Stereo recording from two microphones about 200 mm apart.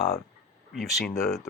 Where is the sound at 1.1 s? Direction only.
15° left (ahead or behind).